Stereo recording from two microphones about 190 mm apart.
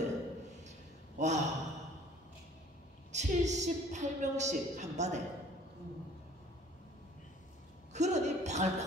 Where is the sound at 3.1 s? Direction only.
40° right (ahead or behind).